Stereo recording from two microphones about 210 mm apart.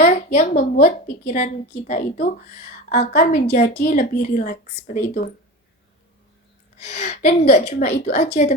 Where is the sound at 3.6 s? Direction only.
55° left (ahead or behind).